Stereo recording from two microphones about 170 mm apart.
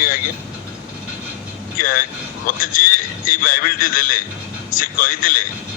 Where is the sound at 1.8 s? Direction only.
55° left (ahead or behind).